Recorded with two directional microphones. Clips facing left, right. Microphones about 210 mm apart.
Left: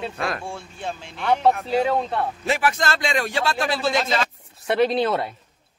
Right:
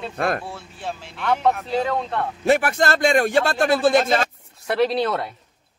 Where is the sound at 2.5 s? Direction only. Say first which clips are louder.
Right 6 dB; 55° right (ahead or behind).